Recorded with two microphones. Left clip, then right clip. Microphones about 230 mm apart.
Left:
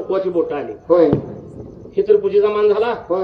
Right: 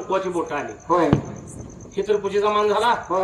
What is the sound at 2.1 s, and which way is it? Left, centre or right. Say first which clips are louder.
A man's voice: left 4 dB; right.